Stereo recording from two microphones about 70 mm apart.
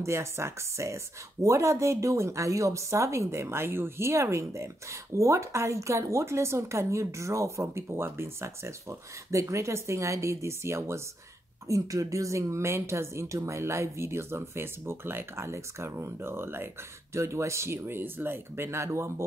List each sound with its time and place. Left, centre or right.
0.0 s a woman's voice: right
17.1 s speech: right